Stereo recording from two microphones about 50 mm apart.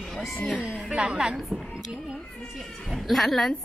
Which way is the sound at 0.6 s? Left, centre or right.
Right.